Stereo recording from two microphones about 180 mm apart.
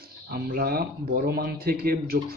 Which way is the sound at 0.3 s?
55° right (ahead or behind).